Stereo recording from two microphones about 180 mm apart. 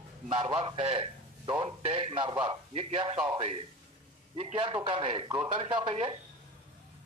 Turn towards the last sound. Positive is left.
turn(degrees=-30)  # may be behind; listen again after turning